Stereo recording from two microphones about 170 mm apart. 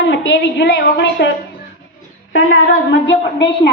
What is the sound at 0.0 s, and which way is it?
A woman's voice, 90° left.